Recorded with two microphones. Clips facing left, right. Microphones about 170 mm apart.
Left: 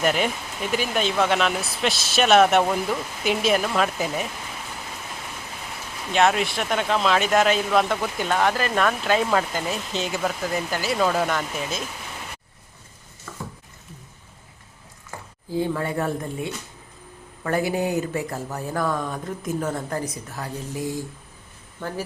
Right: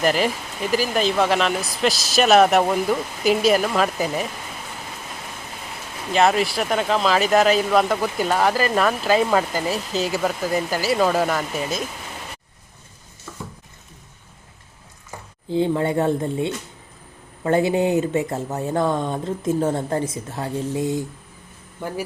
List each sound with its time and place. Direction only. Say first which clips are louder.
0.0 s speech: right 2 dB; centre (ahead or behind)
6.1 s speech: right 2 dB; centre (ahead or behind)
15.4 s speech: right 5 dB; 25° right (ahead or behind)
21.8 s speech: right 2 dB; 15° right (ahead or behind)